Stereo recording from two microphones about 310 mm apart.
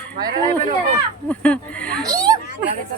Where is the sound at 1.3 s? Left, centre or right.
Centre.